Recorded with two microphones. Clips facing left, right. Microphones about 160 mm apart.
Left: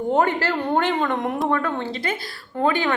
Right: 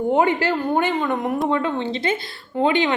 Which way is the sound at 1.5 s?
20° right (ahead or behind).